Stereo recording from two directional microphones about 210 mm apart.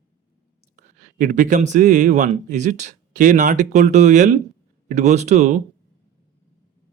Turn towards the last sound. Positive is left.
turn(degrees=-35)  # may be behind; listen again after turning